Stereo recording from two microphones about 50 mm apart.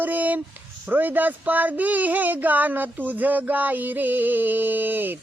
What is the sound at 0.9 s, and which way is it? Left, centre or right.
Speech, right.